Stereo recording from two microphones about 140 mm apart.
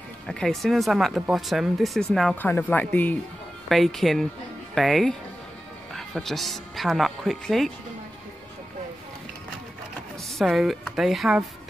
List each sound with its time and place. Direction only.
0.3 s speech: 5° left (ahead or behind)
3.6 s speech: centre (ahead or behind)
10.3 s speech: centre (ahead or behind)